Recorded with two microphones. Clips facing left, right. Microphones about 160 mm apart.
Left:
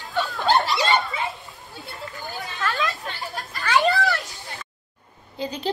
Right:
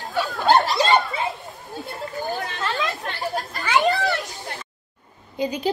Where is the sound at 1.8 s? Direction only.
40° right (ahead or behind).